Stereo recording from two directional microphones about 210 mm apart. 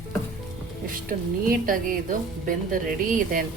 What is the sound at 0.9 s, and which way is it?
A woman's voice, 40° right (ahead or behind).